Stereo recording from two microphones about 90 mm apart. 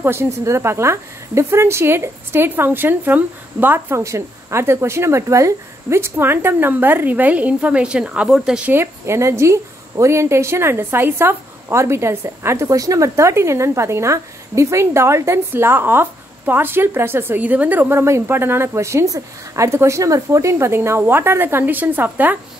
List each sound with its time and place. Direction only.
0.0 s a woman's voice: 25° right (ahead or behind); by 8.6 s 10° right (ahead or behind)
8.6 s a woman's voice: 25° right (ahead or behind)